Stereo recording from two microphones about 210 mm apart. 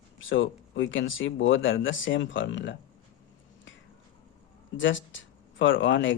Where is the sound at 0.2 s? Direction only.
65° left (ahead or behind).